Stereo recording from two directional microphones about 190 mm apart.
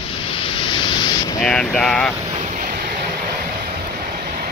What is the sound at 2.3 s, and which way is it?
Vehicle, 40° right (ahead or behind).